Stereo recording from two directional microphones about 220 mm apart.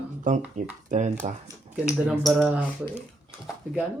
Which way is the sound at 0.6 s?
35° right (ahead or behind).